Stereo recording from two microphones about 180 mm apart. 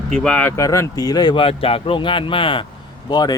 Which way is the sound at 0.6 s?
15° left (ahead or behind).